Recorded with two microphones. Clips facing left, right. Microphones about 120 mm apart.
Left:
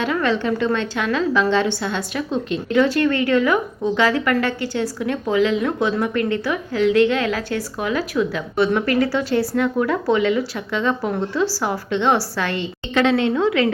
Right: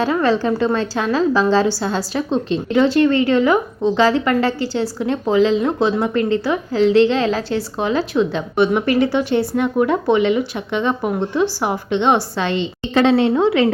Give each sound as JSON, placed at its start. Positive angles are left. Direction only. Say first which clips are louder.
{"t": 0.0, "sound": "a woman's voice", "louder": "right 4 dB", "side_deg": -35}